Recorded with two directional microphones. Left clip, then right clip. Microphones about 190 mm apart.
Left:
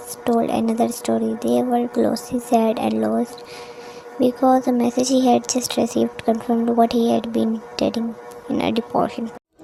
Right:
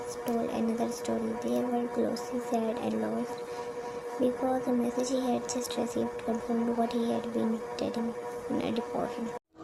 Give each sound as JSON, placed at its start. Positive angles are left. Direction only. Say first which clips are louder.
{"t": 0.3, "sound": "speech", "louder": "left 13 dB", "side_deg": 30}
{"t": 4.2, "sound": "speech", "louder": "left 13 dB", "side_deg": 30}